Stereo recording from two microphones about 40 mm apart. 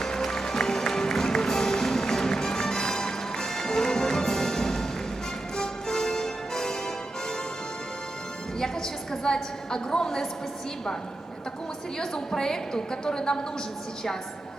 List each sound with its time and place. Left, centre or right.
0.0 s music: centre
8.5 s a woman's voice: centre
11.9 s a woman's voice: centre